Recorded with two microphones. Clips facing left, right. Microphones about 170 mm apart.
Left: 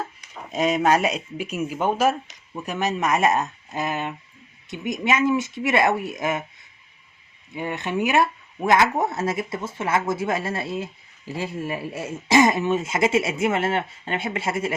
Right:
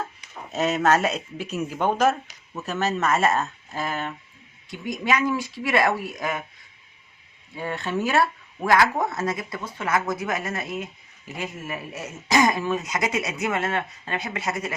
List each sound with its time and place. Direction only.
0.5 s speech: 10° left (ahead or behind)
7.5 s speech: 20° left (ahead or behind)